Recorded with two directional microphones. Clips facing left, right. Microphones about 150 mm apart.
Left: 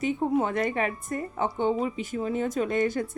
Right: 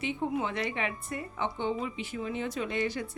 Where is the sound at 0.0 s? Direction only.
45° left (ahead or behind).